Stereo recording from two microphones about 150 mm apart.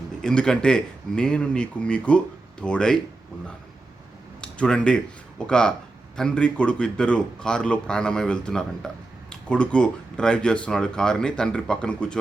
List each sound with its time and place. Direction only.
0.2 s speech: 5° left (ahead or behind)
4.4 s a sound: 5° left (ahead or behind)
5.5 s speech: 5° left (ahead or behind)